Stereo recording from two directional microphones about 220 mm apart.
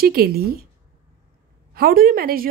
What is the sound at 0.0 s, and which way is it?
Speech, 45° right (ahead or behind).